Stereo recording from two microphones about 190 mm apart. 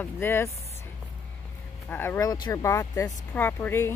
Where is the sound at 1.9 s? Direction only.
10° left (ahead or behind).